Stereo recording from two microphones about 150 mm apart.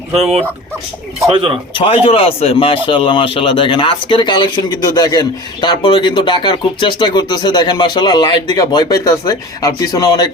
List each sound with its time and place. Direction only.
1.3 s speech: 35° right (ahead or behind)
1.8 s a man's voice: 40° left (ahead or behind)